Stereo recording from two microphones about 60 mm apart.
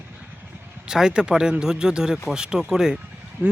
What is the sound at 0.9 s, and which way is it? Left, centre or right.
Speech, centre.